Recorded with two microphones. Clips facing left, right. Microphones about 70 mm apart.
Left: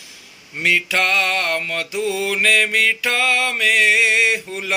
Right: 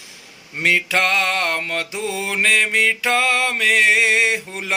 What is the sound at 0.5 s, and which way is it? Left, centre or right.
Mantra, right.